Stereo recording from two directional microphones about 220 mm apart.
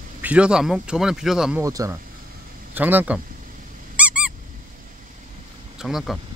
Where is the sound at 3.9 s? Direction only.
5° right (ahead or behind).